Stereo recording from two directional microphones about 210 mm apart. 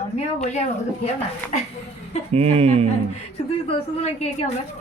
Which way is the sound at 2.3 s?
30° right (ahead or behind).